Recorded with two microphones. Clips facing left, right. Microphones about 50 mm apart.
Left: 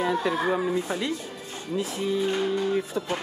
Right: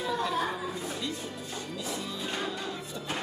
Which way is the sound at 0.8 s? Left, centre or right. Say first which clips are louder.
Left 6 dB; left.